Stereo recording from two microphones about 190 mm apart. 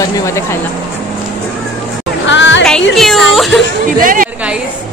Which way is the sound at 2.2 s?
75° left (ahead or behind).